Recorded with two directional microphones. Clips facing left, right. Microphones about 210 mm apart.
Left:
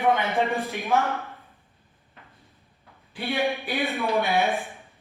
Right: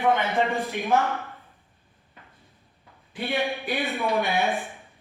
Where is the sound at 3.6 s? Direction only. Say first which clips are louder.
Even; centre (ahead or behind).